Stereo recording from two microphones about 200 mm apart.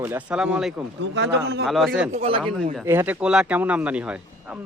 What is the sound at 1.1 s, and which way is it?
Speech, 60° right (ahead or behind).